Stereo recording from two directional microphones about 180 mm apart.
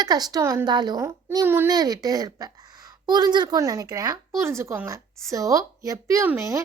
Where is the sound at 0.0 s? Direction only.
20° right (ahead or behind).